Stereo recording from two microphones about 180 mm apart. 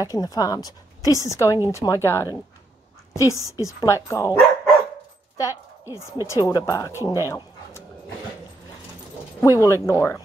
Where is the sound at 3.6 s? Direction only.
15° left (ahead or behind).